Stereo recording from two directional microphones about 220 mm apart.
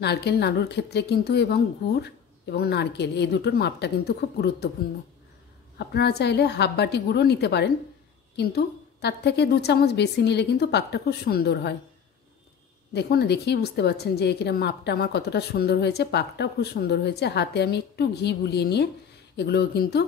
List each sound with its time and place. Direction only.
0.0 s a woman's voice: 50° left (ahead or behind)
5.8 s a woman's voice: 50° left (ahead or behind)
12.9 s a woman's voice: 50° left (ahead or behind)